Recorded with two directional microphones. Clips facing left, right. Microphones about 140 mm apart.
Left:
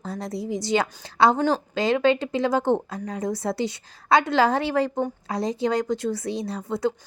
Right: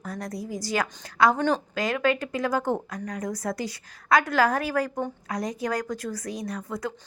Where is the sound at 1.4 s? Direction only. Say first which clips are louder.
Left 2 dB; 5° left (ahead or behind).